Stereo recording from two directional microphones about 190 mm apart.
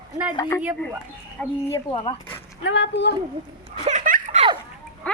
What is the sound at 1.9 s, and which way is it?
Speech, 25° left (ahead or behind).